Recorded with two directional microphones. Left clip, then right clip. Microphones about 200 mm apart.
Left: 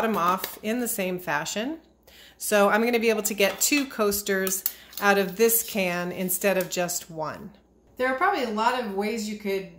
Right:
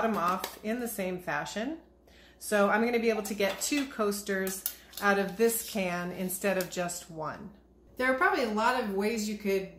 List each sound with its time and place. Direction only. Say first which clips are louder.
0.0 s speech: left 5 dB; 35° left (ahead or behind)
8.0 s speech: left 3 dB; 5° right (ahead or behind)